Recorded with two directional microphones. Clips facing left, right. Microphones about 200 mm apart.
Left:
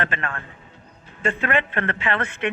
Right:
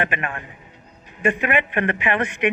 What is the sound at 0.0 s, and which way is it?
A man's voice, 15° right (ahead or behind).